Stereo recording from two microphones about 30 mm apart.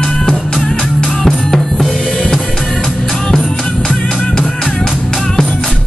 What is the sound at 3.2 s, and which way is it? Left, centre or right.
Music, centre.